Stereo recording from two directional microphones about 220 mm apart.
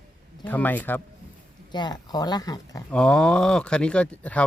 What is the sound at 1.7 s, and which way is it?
Speech, 20° left (ahead or behind).